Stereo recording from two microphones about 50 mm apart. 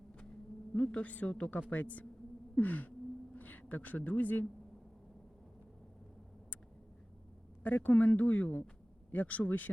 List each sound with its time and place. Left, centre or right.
0.8 s a man's voice: left
7.6 s speech: left